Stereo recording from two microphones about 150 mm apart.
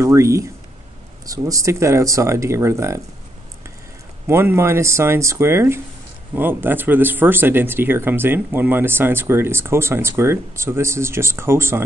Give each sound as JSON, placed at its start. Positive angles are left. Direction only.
{"t": 0.0, "sound": "speech", "side_deg": -20}
{"t": 4.3, "sound": "speech", "side_deg": -15}